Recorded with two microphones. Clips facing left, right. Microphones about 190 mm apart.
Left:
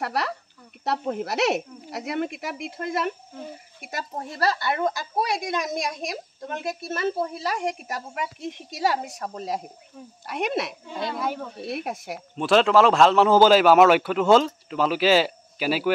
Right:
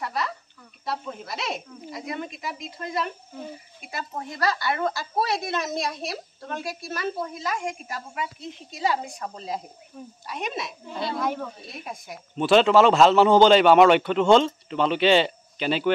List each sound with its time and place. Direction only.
0.0 s speech: 70° left (ahead or behind)
4.2 s a woman's voice: 30° left (ahead or behind); by 9.6 s 45° left (ahead or behind)
10.2 s speech: 65° left (ahead or behind)
12.4 s a man's voice: centre (ahead or behind)